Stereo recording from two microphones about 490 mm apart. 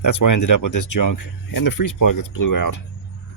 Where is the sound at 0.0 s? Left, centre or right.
Left.